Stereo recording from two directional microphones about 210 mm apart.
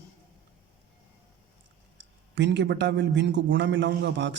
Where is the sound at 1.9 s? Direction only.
55° right (ahead or behind).